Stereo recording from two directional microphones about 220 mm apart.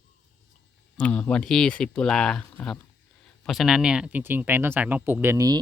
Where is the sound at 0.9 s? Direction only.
5° left (ahead or behind).